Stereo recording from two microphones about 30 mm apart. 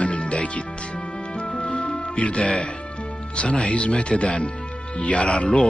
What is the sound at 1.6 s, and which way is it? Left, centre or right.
Music, left.